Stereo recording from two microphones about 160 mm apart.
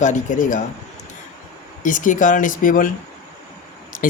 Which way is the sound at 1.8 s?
55° left (ahead or behind).